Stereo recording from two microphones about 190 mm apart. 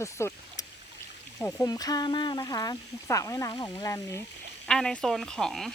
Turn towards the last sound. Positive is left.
turn(degrees=0)  # may be behind; listen again after turning